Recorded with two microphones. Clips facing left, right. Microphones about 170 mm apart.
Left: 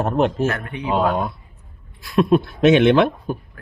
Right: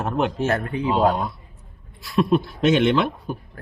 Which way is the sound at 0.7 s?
30° right (ahead or behind).